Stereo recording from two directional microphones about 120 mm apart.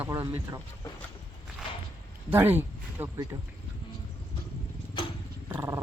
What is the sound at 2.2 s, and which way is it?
Speech, 15° right (ahead or behind).